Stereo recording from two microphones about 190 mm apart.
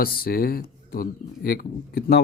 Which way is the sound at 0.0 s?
50° left (ahead or behind).